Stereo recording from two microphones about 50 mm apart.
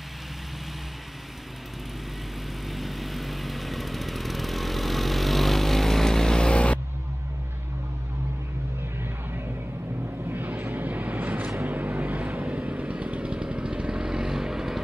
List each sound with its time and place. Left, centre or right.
2.7 s vehicle: centre; by 6.8 s left
10.3 s vehicle: right; by 14.8 s centre